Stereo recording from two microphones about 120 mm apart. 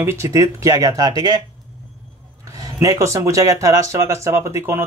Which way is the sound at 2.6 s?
30° right (ahead or behind).